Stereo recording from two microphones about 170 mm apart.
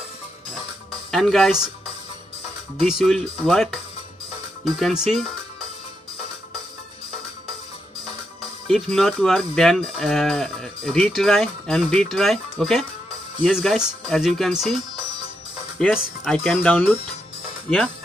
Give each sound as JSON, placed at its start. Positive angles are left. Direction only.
{"t": 1.1, "sound": "livestock", "side_deg": 0}
{"t": 2.8, "sound": "livestock", "side_deg": 0}
{"t": 8.6, "sound": "livestock", "side_deg": 0}
{"t": 15.9, "sound": "livestock", "side_deg": 0}
{"t": 16.5, "sound": "speech", "side_deg": 10}